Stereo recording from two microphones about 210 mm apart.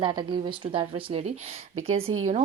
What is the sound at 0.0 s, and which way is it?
A woman's voice, 20° right (ahead or behind).